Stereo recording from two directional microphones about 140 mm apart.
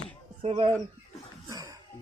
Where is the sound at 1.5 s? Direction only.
25° right (ahead or behind).